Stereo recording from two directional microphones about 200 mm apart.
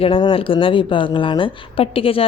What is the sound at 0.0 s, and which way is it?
A woman's voice, 25° left (ahead or behind).